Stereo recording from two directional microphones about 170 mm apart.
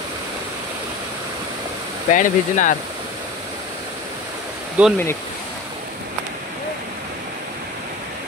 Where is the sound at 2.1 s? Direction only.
50° left (ahead or behind).